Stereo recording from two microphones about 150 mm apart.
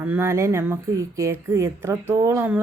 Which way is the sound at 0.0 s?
15° right (ahead or behind).